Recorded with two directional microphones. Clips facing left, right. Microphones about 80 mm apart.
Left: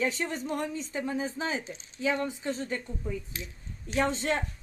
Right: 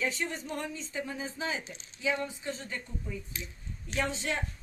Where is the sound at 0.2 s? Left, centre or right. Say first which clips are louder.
Left 4 dB; left.